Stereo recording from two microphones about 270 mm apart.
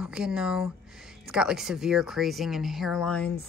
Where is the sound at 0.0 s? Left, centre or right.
Centre.